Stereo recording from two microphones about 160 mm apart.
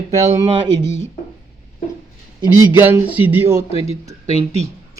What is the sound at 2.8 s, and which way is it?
Speech, 10° right (ahead or behind).